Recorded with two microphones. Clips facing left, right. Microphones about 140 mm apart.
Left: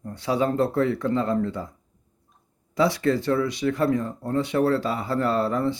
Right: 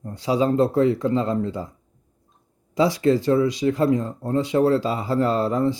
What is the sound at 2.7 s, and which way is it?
Speech, 15° right (ahead or behind).